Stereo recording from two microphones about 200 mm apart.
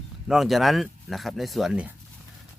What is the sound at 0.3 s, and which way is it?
Speech, centre (ahead or behind).